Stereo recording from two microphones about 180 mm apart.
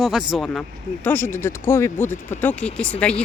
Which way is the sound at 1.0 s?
10° left (ahead or behind).